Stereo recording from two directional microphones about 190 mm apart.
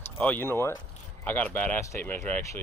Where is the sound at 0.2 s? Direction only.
10° left (ahead or behind).